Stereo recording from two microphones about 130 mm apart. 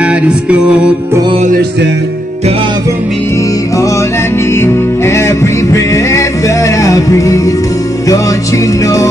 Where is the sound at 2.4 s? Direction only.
50° right (ahead or behind).